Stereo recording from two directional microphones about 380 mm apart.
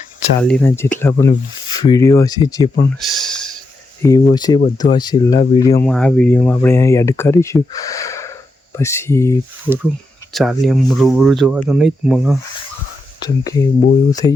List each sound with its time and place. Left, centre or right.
0.4 s speech: centre
3.0 s a sound: centre
4.0 s speech: centre
9.6 s speech: centre
13.2 s speech: centre